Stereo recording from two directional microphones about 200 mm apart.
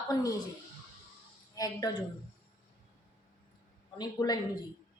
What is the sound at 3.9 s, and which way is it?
Speech, 20° left (ahead or behind).